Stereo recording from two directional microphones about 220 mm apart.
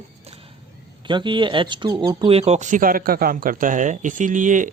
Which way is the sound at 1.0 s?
20° right (ahead or behind).